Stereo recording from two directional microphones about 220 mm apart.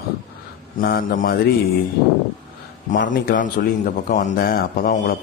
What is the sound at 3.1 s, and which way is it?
A man's voice, 35° left (ahead or behind).